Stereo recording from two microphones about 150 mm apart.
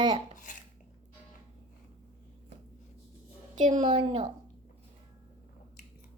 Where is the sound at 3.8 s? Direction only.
40° right (ahead or behind).